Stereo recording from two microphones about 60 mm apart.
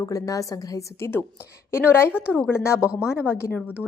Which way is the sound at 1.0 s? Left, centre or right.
Left.